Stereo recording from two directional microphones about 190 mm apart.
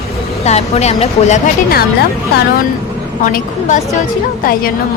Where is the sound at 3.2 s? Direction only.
40° left (ahead or behind).